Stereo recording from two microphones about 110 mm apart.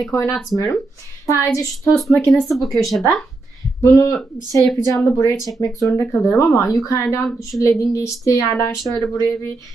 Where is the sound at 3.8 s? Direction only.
30° left (ahead or behind).